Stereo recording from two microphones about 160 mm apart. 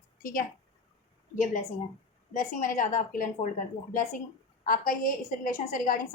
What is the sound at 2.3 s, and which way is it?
A woman's voice, 55° left (ahead or behind).